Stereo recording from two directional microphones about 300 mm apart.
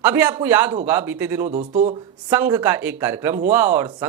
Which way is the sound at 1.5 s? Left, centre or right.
Right.